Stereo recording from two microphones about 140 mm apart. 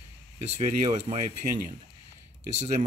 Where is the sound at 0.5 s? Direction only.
50° right (ahead or behind).